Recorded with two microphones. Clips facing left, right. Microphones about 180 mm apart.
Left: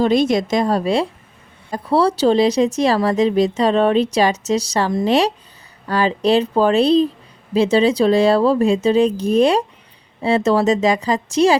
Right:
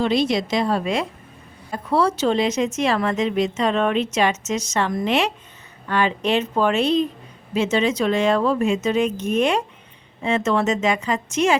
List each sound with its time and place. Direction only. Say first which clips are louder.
0.0 s a woman's voice: left 4 dB; 45° left (ahead or behind)